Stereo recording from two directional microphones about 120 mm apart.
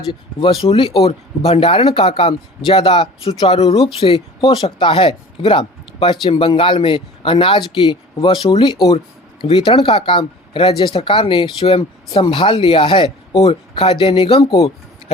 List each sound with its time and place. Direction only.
0.1 s speech: 45° left (ahead or behind)
13.4 s speech: 55° left (ahead or behind)